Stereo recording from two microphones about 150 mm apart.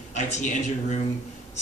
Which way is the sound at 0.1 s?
50° left (ahead or behind).